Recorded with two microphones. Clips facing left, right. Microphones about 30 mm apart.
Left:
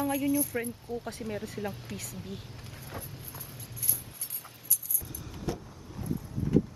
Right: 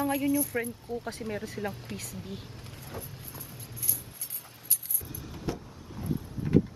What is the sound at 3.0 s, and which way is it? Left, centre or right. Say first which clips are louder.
Clip-clop: right 1 dB; centre.